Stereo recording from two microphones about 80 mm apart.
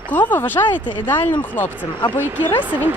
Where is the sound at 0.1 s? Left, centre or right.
Left.